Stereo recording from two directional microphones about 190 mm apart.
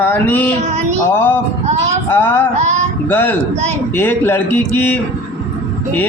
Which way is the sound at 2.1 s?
10° left (ahead or behind).